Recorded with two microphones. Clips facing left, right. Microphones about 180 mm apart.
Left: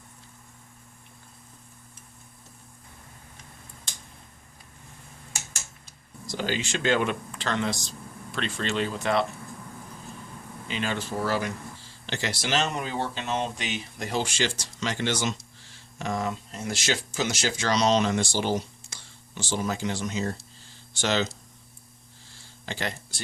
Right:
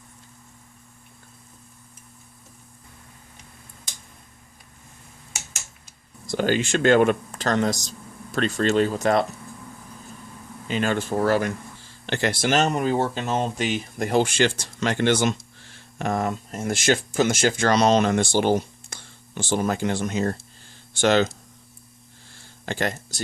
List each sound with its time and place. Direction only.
6.2 s speech: 55° right (ahead or behind)
10.7 s speech: 45° right (ahead or behind)
22.4 s a sound: 50° right (ahead or behind)